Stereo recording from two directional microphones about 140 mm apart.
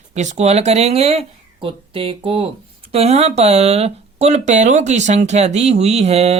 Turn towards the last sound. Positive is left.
turn(degrees=-50)  # may be behind; listen again after turning